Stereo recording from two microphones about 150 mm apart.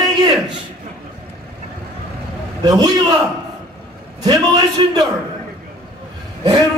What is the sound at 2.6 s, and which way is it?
Speech, 25° right (ahead or behind).